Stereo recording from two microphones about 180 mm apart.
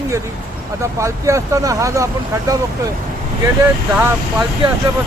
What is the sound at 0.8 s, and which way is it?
Speech, 15° right (ahead or behind).